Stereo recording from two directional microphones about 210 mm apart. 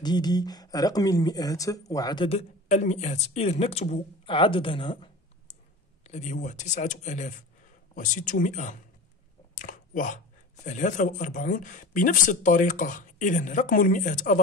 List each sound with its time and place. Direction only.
0.0 s speech: 20° left (ahead or behind); by 8.7 s 35° left (ahead or behind)
9.6 s a sound: 40° left (ahead or behind)
10.6 s speech: 35° left (ahead or behind)